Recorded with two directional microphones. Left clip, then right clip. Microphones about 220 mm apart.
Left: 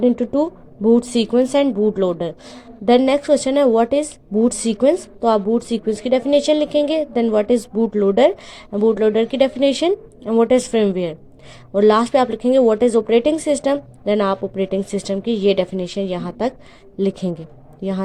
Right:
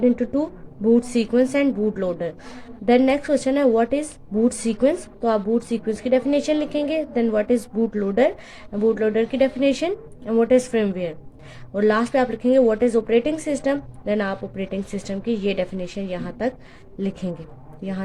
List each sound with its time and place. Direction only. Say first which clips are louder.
0.0 s a woman's voice: left 4 dB; 20° left (ahead or behind)